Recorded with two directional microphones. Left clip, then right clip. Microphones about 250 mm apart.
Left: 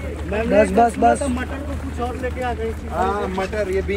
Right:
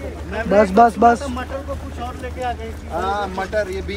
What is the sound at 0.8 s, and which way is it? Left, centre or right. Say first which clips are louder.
Speech: right 3 dB; centre.